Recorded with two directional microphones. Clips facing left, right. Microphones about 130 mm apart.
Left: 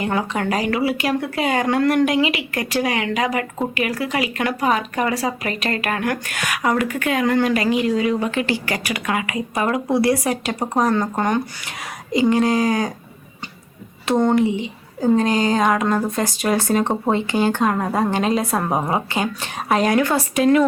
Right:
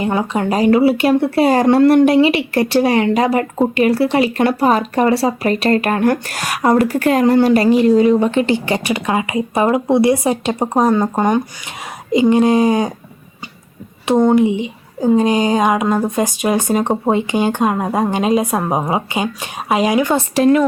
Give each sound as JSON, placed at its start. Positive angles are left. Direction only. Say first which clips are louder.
{"t": 0.0, "sound": "a woman's voice", "louder": "right 4 dB", "side_deg": -25}
{"t": 14.3, "sound": "a woman's voice", "louder": "right 4 dB", "side_deg": -20}
{"t": 20.3, "sound": "speech", "louder": "right 4 dB", "side_deg": -35}